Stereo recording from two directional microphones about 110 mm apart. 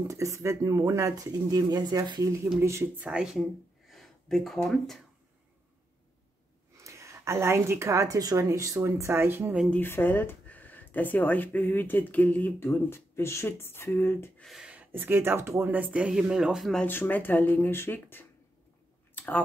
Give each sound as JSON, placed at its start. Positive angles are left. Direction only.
{"t": 0.1, "sound": "speech", "side_deg": -30}
{"t": 2.6, "sound": "speech", "side_deg": -25}
{"t": 3.1, "sound": "speech", "side_deg": -5}
{"t": 6.8, "sound": "speech", "side_deg": -25}
{"t": 9.7, "sound": "speech", "side_deg": 20}
{"t": 14.4, "sound": "speech", "side_deg": 0}
{"t": 14.7, "sound": "speech", "side_deg": -15}
{"t": 16.8, "sound": "speech", "side_deg": 20}
{"t": 19.1, "sound": "a sound", "side_deg": 15}